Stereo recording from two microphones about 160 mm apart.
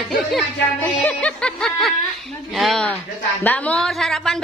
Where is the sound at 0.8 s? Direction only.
10° left (ahead or behind).